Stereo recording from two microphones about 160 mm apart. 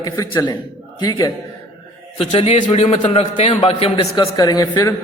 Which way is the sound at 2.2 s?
35° left (ahead or behind).